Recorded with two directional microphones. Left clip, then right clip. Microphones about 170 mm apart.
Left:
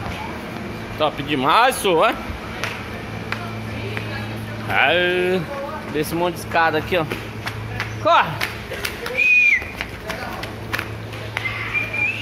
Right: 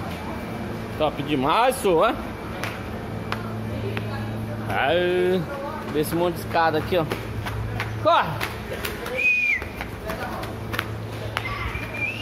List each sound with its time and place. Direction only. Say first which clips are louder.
0.9 s speech: left 3 dB; centre (ahead or behind)
4.6 s speech: left 5 dB; centre (ahead or behind)
5.9 s speech: left 2 dB; 15° left (ahead or behind)
9.2 s bird: left 6 dB; 15° left (ahead or behind)